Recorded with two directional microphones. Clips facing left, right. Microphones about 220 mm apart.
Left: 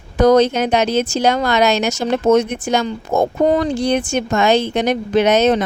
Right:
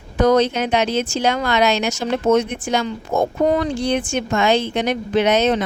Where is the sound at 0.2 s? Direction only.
40° left (ahead or behind).